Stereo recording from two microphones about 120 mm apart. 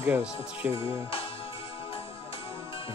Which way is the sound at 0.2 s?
15° right (ahead or behind).